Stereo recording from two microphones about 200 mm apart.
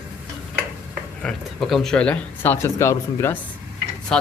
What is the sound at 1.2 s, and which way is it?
Speech, centre (ahead or behind).